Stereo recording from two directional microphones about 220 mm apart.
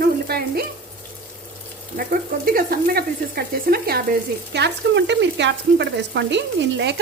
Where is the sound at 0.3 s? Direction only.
45° right (ahead or behind).